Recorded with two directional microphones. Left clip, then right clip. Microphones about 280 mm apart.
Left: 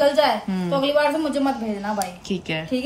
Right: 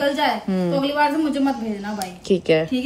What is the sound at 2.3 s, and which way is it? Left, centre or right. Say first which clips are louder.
Speech: right 9 dB; right.